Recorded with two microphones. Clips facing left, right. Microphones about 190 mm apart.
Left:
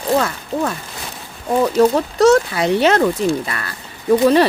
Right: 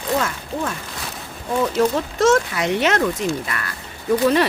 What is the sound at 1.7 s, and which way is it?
Speech, 35° left (ahead or behind).